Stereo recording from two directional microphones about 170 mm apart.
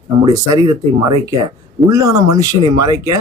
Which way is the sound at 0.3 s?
25° right (ahead or behind).